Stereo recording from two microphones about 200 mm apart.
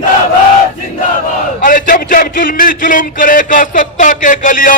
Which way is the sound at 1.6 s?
40° left (ahead or behind).